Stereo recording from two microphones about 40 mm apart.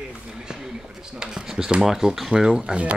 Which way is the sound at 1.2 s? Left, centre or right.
Centre.